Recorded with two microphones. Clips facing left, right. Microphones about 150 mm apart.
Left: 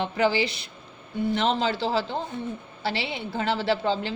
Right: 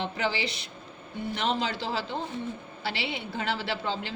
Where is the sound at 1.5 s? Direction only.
30° left (ahead or behind).